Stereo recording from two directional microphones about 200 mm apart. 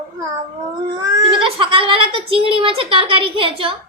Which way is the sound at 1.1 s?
25° right (ahead or behind).